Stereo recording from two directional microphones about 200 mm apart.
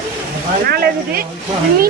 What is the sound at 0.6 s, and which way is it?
Speech, 50° right (ahead or behind).